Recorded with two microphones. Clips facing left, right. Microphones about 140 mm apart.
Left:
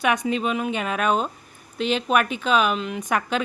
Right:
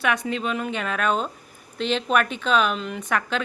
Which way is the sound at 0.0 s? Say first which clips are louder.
Left 2 dB; 15° left (ahead or behind).